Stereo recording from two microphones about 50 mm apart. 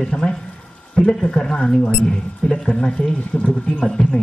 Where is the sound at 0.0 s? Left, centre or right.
Centre.